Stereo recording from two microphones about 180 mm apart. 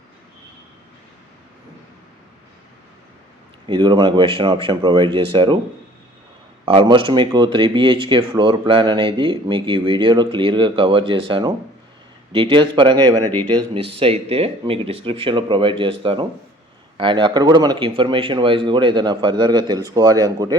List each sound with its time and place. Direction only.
3.7 s speech: 25° right (ahead or behind)
6.7 s speech: 25° right (ahead or behind)